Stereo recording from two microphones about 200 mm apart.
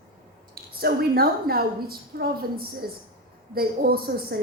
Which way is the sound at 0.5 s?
50° right (ahead or behind).